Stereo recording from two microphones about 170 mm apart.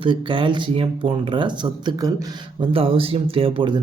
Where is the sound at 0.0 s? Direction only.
30° right (ahead or behind).